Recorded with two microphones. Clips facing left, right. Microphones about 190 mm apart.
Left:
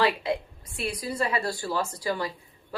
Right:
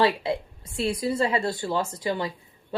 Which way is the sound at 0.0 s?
30° right (ahead or behind).